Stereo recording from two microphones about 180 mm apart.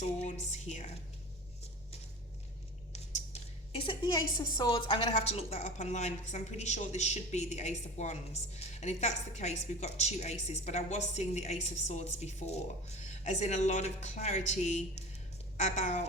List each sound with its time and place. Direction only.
0.0 s speech: 40° left (ahead or behind)
3.8 s a woman's voice: 25° left (ahead or behind); by 16.0 s 40° left (ahead or behind)